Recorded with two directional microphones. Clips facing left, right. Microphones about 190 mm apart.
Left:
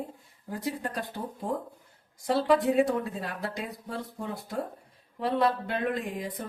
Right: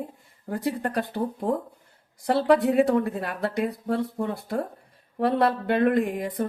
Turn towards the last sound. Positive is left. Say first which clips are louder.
# right 8 dB
turn(degrees=-60)  # may be behind; listen again after turning